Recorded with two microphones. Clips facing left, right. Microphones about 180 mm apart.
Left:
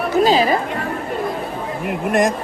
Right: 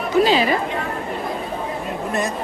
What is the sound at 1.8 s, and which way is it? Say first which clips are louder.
Vehicle: left 9 dB; 90° left.